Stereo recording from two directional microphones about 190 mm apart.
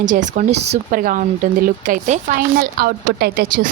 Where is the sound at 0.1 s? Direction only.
40° right (ahead or behind).